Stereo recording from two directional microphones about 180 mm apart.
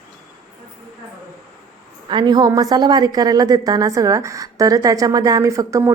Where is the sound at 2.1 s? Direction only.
25° right (ahead or behind).